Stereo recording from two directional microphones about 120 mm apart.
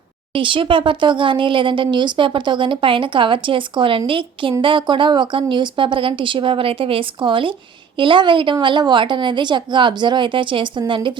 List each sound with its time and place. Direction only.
0.3 s a woman's voice: 45° right (ahead or behind)